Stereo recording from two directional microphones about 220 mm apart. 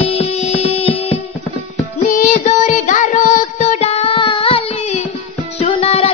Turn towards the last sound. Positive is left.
turn(degrees=30)  # may be behind; listen again after turning